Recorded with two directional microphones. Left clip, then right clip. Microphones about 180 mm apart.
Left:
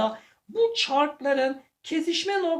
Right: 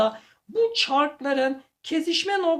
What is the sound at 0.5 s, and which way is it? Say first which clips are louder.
A woman's voice: right 1 dB; 40° right (ahead or behind).